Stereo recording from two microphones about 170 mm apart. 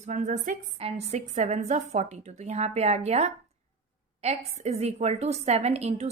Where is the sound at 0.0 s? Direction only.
45° right (ahead or behind).